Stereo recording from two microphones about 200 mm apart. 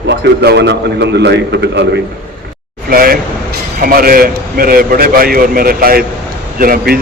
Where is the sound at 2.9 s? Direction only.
45° right (ahead or behind).